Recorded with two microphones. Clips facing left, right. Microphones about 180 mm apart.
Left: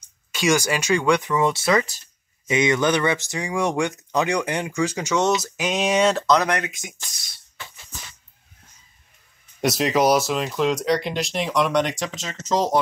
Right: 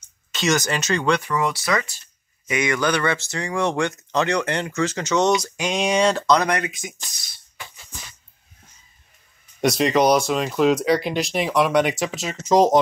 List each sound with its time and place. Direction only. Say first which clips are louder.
0.3 s speech: left 1 dB; 10° left (ahead or behind)
9.6 s speech: right 2 dB; centre (ahead or behind); by 12.8 s 15° right (ahead or behind)